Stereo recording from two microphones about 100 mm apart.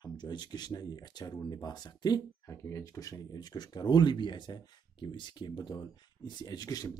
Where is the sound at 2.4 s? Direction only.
30° left (ahead or behind).